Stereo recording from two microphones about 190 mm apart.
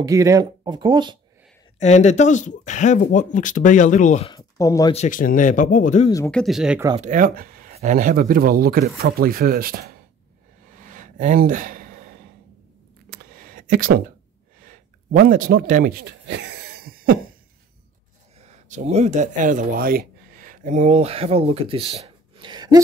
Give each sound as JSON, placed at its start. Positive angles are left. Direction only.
{"t": 0.0, "sound": "speech", "side_deg": -15}
{"t": 1.8, "sound": "speech", "side_deg": 40}
{"t": 4.3, "sound": "speech", "side_deg": 20}
{"t": 4.9, "sound": "speech", "side_deg": 40}
{"t": 6.3, "sound": "speech", "side_deg": 0}
{"t": 7.0, "sound": "speech", "side_deg": -40}
{"t": 10.8, "sound": "a sound", "side_deg": -45}
{"t": 13.1, "sound": "a sound", "side_deg": -50}
{"t": 18.4, "sound": "speech", "side_deg": -40}